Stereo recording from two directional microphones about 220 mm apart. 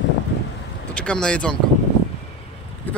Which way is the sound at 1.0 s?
5° left (ahead or behind).